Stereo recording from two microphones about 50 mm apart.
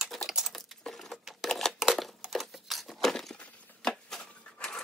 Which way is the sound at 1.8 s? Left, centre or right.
Centre.